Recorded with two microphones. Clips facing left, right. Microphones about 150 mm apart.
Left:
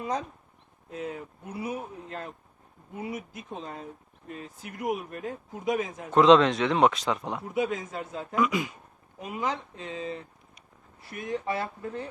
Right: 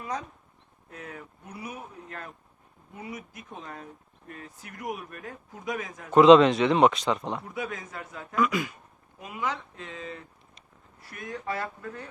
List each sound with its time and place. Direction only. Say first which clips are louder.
0.9 s speech: left 7 dB; 25° left (ahead or behind)
6.1 s speech: right 3 dB; 5° right (ahead or behind)
7.5 s speech: left 6 dB; 20° left (ahead or behind)